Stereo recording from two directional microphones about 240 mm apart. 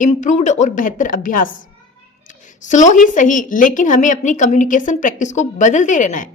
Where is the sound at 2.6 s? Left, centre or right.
Left.